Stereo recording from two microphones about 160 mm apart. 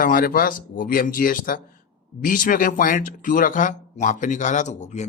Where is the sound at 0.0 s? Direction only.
60° left (ahead or behind).